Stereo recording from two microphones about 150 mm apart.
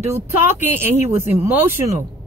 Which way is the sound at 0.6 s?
15° right (ahead or behind).